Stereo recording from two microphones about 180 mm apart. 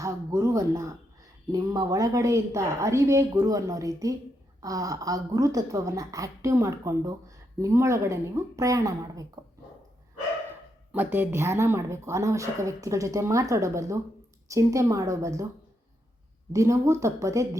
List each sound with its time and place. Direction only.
0.0 s speech: 15° right (ahead or behind)
10.9 s speech: 10° right (ahead or behind)
16.5 s speech: 15° right (ahead or behind)